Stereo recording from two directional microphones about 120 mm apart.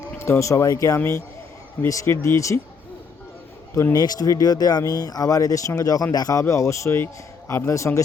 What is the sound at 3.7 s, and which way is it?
Speech, 25° left (ahead or behind).